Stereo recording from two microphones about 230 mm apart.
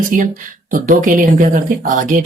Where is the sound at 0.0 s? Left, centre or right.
Right.